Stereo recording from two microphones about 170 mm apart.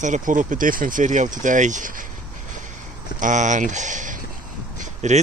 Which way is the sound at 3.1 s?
50° right (ahead or behind).